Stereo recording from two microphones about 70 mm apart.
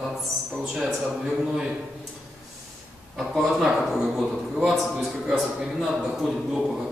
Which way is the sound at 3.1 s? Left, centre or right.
Centre.